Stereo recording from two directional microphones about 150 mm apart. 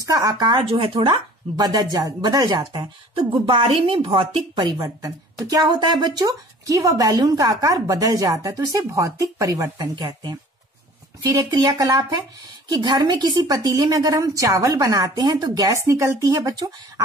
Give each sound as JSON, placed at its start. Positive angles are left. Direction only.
{"t": 0.0, "sound": "speech", "side_deg": -25}
{"t": 11.3, "sound": "speech", "side_deg": -25}